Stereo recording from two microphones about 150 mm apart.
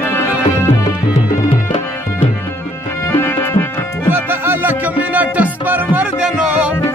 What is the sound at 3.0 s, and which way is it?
Music, 15° left (ahead or behind).